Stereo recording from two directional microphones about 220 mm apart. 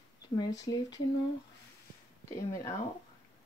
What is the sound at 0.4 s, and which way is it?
Speech, 20° left (ahead or behind).